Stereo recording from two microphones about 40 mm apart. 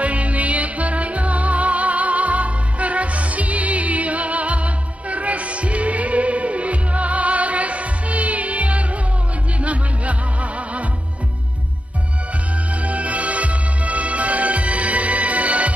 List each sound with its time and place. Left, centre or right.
0.0 s music: right
12.8 s music: right